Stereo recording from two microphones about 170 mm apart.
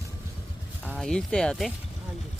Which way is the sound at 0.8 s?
5° left (ahead or behind).